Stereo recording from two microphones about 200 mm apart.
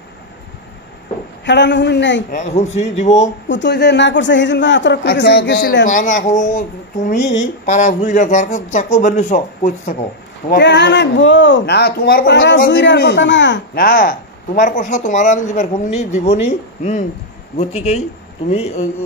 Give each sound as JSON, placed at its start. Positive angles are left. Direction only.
{"t": 1.4, "sound": "a woman's voice", "side_deg": 60}
{"t": 2.3, "sound": "speech", "side_deg": 35}
{"t": 3.4, "sound": "a woman's voice", "side_deg": 60}
{"t": 5.9, "sound": "speech", "side_deg": 40}
{"t": 7.6, "sound": "speech", "side_deg": 35}
{"t": 10.5, "sound": "a woman's voice", "side_deg": 60}